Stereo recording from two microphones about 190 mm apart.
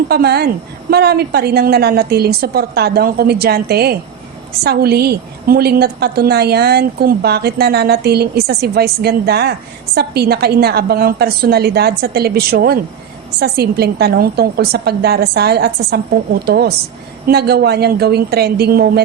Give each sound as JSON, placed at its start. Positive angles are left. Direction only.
{"t": 0.1, "sound": "a woman's voice", "side_deg": -55}